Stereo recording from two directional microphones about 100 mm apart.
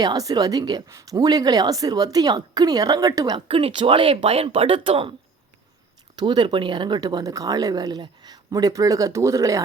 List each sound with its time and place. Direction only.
0.0 s speech: 40° right (ahead or behind)
3.3 s speech: 65° right (ahead or behind)
6.1 s speech: 45° right (ahead or behind)